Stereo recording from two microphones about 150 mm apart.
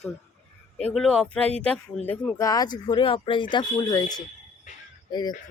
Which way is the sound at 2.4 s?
25° left (ahead or behind).